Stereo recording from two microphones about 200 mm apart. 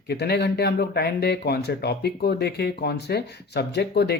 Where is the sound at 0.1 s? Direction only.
55° left (ahead or behind).